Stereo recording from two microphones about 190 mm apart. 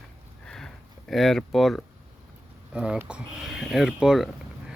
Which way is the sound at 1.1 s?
Centre (ahead or behind).